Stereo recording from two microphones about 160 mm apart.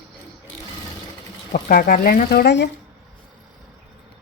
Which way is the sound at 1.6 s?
65° left (ahead or behind).